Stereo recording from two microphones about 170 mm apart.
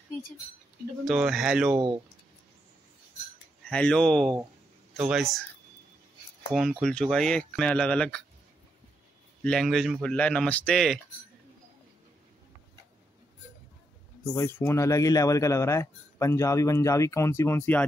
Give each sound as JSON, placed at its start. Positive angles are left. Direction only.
{"t": 1.0, "sound": "speech", "side_deg": 0}
{"t": 3.6, "sound": "speech", "side_deg": 5}
{"t": 6.5, "sound": "speech", "side_deg": 0}
{"t": 9.4, "sound": "speech", "side_deg": 0}
{"t": 14.2, "sound": "speech", "side_deg": 15}